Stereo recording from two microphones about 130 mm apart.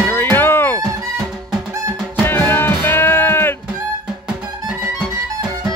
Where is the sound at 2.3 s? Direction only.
15° left (ahead or behind).